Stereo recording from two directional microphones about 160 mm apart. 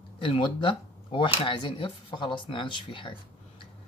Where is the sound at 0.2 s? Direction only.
35° left (ahead or behind).